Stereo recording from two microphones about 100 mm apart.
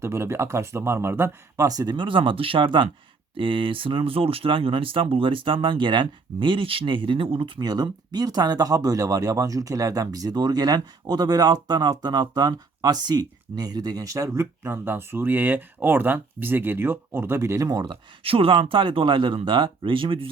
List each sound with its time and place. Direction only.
0.0 s speech: 25° right (ahead or behind)
1.6 s speech: 40° right (ahead or behind)
18.2 s speech: 65° right (ahead or behind)